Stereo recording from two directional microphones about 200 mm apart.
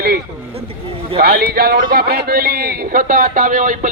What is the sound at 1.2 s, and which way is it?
Speech, 50° right (ahead or behind).